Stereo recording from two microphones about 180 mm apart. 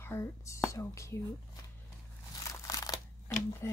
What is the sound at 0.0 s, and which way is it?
Speech, 15° left (ahead or behind).